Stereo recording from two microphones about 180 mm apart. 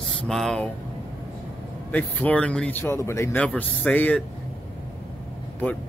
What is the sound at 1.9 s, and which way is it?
Speech, 10° left (ahead or behind).